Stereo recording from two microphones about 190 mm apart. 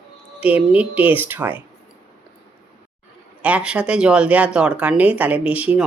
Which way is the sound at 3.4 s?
5° right (ahead or behind).